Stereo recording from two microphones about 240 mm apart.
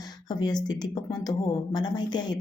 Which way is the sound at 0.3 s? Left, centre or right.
Centre.